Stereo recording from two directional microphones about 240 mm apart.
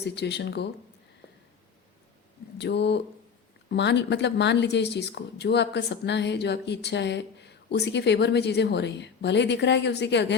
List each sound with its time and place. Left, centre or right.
0.0 s speech: left
2.6 s speech: left